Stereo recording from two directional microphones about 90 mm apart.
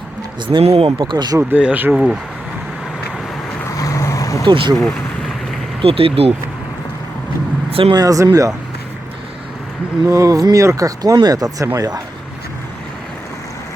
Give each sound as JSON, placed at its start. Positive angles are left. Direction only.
{"t": 0.4, "sound": "speech", "side_deg": -75}
{"t": 0.9, "sound": "speech", "side_deg": -50}
{"t": 1.4, "sound": "speech", "side_deg": -20}
{"t": 1.9, "sound": "speech", "side_deg": -5}
{"t": 3.8, "sound": "boat", "side_deg": 40}
{"t": 4.4, "sound": "speech", "side_deg": -65}
{"t": 5.8, "sound": "speech", "side_deg": -90}
{"t": 7.7, "sound": "speech", "side_deg": -90}
{"t": 7.9, "sound": "speech", "side_deg": -40}
{"t": 10.1, "sound": "speech", "side_deg": -40}